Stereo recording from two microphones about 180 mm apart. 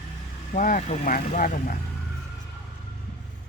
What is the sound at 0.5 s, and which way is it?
Speech, 45° left (ahead or behind).